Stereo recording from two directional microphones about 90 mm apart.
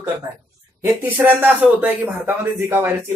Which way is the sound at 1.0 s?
20° right (ahead or behind).